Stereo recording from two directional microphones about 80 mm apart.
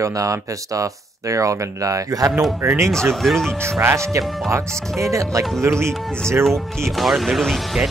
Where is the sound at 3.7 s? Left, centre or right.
Right.